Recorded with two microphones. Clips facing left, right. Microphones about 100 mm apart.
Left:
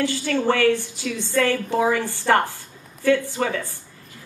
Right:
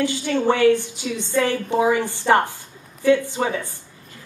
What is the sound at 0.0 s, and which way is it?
A woman's voice, 20° right (ahead or behind).